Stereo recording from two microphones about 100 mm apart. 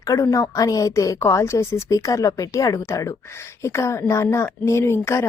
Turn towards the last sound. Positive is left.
turn(degrees=25)  # may be behind; listen again after turning